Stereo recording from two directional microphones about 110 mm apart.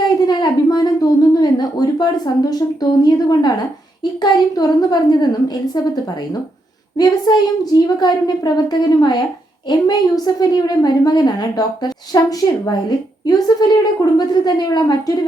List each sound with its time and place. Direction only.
0.3 s a sound: 40° left (ahead or behind)
4.2 s a woman's voice: 40° left (ahead or behind)
6.9 s a woman's voice: 40° left (ahead or behind)